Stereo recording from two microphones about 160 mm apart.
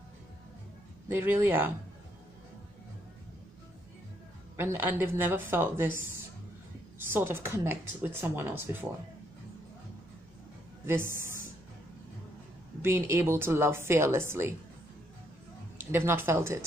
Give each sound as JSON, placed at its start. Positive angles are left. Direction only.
{"t": 1.0, "sound": "a woman's voice", "side_deg": -10}
{"t": 4.6, "sound": "a woman's voice", "side_deg": -15}
{"t": 10.9, "sound": "speech", "side_deg": -15}
{"t": 12.8, "sound": "a woman's voice", "side_deg": -15}
{"t": 15.8, "sound": "a woman's voice", "side_deg": -15}